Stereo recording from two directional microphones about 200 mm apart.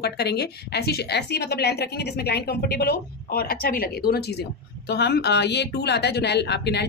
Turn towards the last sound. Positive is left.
turn(degrees=55)  # may be behind; listen again after turning